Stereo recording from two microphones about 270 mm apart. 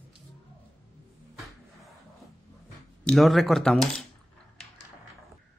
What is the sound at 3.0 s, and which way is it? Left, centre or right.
Speech, centre.